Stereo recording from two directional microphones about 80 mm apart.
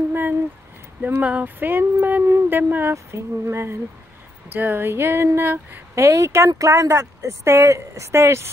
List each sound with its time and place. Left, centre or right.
0.1 s a sound: right
1.0 s speech: centre
2.2 s speech: right
5.9 s speech: right